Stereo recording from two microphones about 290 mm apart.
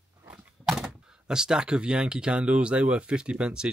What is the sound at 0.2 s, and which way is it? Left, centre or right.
Speech, centre.